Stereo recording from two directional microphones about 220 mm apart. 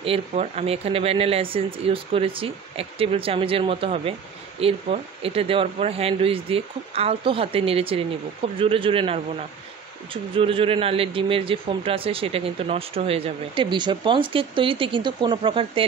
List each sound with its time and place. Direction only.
0.0 s a man's voice: 25° right (ahead or behind)
10.3 s a man's voice: 25° right (ahead or behind)